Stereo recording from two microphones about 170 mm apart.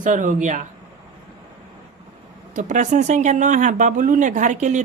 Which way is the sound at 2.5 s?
45° right (ahead or behind).